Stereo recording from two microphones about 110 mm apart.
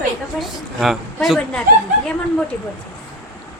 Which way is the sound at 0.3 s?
Centre (ahead or behind).